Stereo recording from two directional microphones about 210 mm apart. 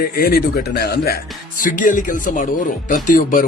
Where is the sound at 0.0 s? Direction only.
45° left (ahead or behind).